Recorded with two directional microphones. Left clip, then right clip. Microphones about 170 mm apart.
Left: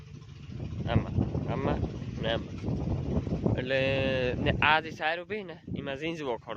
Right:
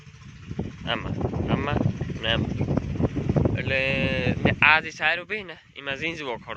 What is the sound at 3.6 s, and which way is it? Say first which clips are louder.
Speech: right 1 dB; 25° left (ahead or behind).